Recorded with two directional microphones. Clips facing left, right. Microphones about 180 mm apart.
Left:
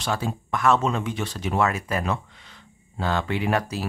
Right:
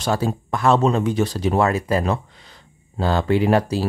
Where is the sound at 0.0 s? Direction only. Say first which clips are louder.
Right 6 dB; 40° right (ahead or behind).